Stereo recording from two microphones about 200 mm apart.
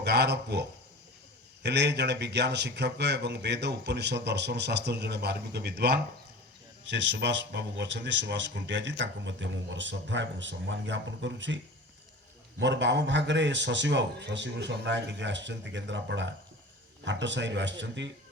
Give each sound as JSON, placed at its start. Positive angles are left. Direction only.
{"t": 0.0, "sound": "speech", "side_deg": -55}
{"t": 1.6, "sound": "speech", "side_deg": -60}